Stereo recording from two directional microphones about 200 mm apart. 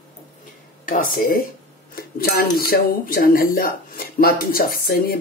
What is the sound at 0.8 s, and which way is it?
Speech, 45° left (ahead or behind).